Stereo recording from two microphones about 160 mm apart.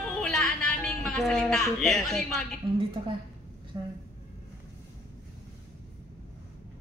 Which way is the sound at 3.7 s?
25° right (ahead or behind).